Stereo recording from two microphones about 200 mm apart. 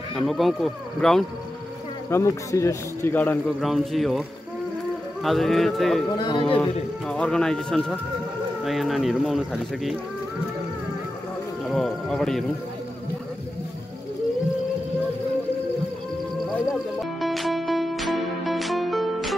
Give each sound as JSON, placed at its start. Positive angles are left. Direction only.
{"t": 0.1, "sound": "speech", "side_deg": 0}
{"t": 2.0, "sound": "speech", "side_deg": 15}
{"t": 3.6, "sound": "speech", "side_deg": 0}
{"t": 5.2, "sound": "speech", "side_deg": 0}
{"t": 6.1, "sound": "speech", "side_deg": 20}
{"t": 6.6, "sound": "speech", "side_deg": 5}
{"t": 11.7, "sound": "speech", "side_deg": 0}
{"t": 17.2, "sound": "music", "side_deg": 0}